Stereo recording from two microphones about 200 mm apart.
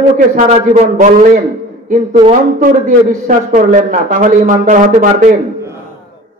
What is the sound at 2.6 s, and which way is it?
A woman's voice, 40° right (ahead or behind).